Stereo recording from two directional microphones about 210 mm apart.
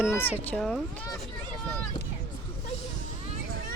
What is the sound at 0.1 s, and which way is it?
Speech, 10° left (ahead or behind).